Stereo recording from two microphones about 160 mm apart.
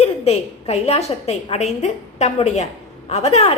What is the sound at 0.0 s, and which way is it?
A woman's voice, 40° left (ahead or behind).